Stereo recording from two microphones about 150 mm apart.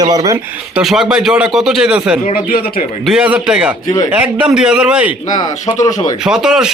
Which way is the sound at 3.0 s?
5° right (ahead or behind).